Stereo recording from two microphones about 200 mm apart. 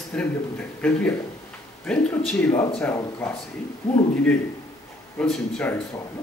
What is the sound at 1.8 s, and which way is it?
A man's voice, 5° left (ahead or behind).